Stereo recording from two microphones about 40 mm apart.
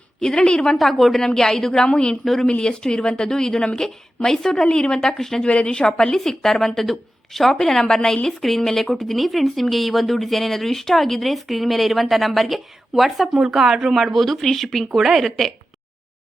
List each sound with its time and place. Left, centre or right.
0.2 s speech: centre
0.8 s a woman's voice: centre
1.9 s speech: left
2.2 s speech: centre
2.5 s a woman's voice: left
4.9 s a woman's voice: centre
5.4 s a woman's voice: left; by 13.9 s centre
13.9 s speech: centre
14.9 s speech: centre